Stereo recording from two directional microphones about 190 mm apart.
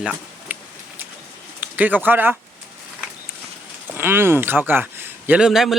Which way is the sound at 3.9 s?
10° right (ahead or behind).